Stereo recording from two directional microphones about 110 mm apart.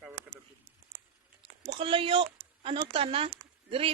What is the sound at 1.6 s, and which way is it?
A woman's voice, 50° right (ahead or behind).